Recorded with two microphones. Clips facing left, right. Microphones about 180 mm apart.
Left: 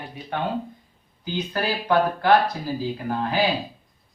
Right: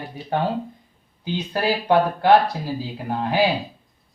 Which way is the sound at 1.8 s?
25° right (ahead or behind).